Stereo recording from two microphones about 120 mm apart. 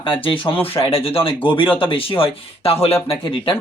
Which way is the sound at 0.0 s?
45° left (ahead or behind).